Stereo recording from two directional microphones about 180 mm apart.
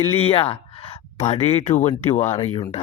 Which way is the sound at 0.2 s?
30° left (ahead or behind).